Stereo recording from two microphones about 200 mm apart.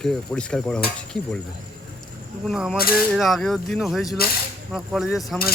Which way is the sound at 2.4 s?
5° right (ahead or behind).